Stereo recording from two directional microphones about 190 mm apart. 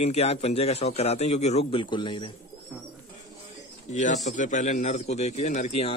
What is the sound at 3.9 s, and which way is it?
A man's voice, 40° left (ahead or behind).